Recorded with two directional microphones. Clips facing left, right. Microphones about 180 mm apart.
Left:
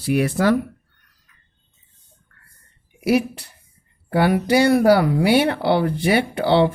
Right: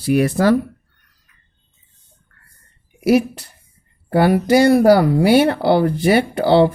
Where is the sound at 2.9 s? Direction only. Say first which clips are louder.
Right 4 dB; 40° right (ahead or behind).